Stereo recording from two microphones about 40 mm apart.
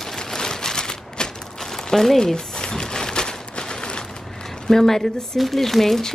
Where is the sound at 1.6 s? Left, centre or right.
Centre.